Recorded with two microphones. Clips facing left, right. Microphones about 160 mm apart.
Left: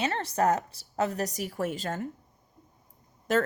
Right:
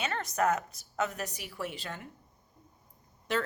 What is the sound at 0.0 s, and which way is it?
A woman's voice, 30° left (ahead or behind).